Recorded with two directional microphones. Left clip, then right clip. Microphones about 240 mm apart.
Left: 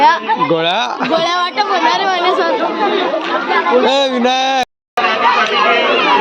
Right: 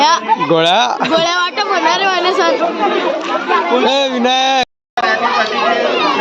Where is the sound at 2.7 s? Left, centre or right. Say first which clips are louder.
Even; centre.